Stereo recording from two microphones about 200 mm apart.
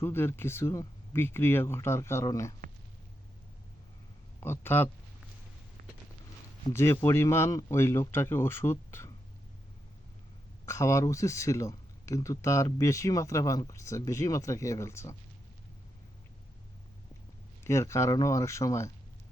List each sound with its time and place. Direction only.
0.0 s speech: 10° left (ahead or behind)
4.4 s speech: 10° left (ahead or behind)
6.7 s speech: 10° left (ahead or behind)
10.7 s speech: 15° left (ahead or behind)
17.6 s speech: 15° left (ahead or behind)